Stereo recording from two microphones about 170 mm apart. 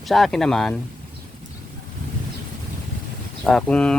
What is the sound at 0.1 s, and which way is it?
Speech, centre (ahead or behind).